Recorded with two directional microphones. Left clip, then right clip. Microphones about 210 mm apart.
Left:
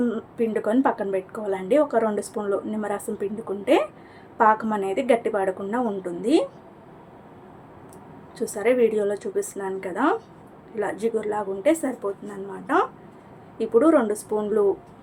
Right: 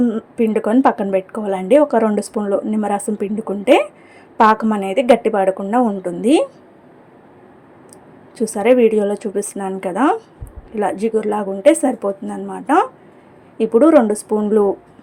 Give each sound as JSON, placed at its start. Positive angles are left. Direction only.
{"t": 0.0, "sound": "a woman's voice", "side_deg": -25}
{"t": 8.4, "sound": "a woman's voice", "side_deg": -30}